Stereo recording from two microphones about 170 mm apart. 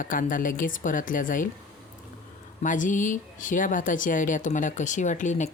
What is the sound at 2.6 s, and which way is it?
Speech, 50° left (ahead or behind).